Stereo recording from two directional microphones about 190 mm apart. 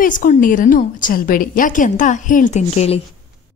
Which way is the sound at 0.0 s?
45° left (ahead or behind).